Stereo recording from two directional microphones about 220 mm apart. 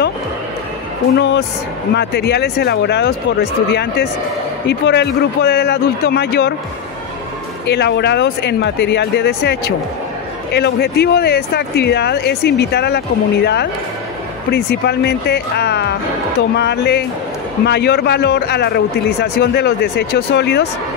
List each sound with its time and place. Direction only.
1.1 s speech: 55° left (ahead or behind)
7.6 s speech: 50° left (ahead or behind)